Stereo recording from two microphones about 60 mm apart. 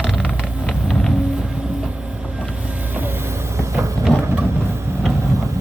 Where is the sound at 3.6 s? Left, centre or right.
Right.